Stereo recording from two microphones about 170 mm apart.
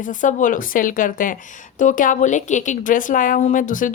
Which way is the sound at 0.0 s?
50° left (ahead or behind).